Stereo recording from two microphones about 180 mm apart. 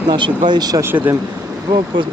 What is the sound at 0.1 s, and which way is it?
Speech, 25° right (ahead or behind).